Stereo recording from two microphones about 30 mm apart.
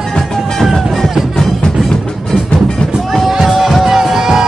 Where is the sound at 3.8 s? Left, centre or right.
Centre.